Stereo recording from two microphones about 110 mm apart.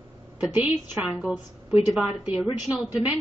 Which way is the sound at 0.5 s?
10° right (ahead or behind).